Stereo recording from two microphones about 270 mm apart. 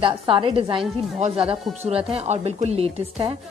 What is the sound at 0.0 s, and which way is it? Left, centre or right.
A woman's voice, centre.